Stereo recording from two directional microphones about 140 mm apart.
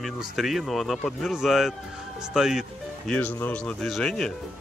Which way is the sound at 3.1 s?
10° left (ahead or behind).